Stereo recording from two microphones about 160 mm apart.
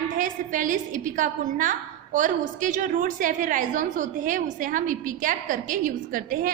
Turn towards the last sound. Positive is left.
turn(degrees=-60)  # may be behind; listen again after turning